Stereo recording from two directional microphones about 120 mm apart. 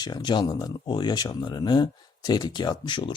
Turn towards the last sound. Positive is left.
turn(degrees=40)  # may be behind; listen again after turning